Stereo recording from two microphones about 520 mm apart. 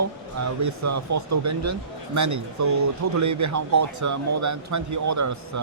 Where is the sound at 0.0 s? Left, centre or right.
Right.